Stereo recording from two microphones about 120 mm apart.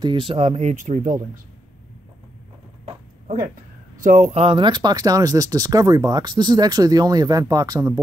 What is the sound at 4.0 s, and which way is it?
Speech, 90° right.